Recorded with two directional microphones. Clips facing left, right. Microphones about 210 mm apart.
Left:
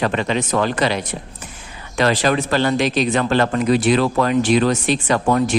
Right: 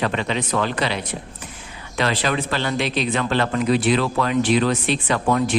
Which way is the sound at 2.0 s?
45° left (ahead or behind).